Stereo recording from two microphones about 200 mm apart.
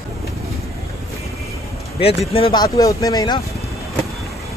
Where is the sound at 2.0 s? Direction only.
30° left (ahead or behind).